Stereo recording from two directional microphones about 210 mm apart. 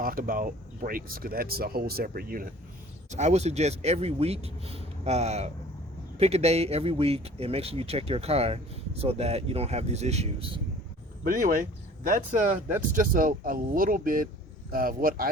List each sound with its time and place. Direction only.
0.0 s speech: 40° right (ahead or behind)
3.1 s speech: 35° right (ahead or behind)